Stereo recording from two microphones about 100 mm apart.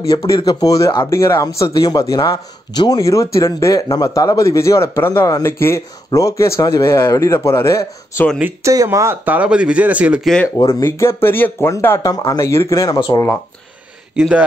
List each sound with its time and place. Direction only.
0.4 s speech: 40° left (ahead or behind); by 8.3 s 25° left (ahead or behind)
8.6 s speech: 30° right (ahead or behind)
9.2 s speech: 15° right (ahead or behind)
10.7 s speech: 25° left (ahead or behind)
12.1 s speech: 40° left (ahead or behind)